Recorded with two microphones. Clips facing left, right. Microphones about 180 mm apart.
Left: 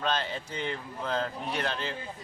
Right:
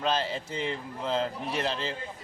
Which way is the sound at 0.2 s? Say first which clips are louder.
Right 3 dB; 30° right (ahead or behind).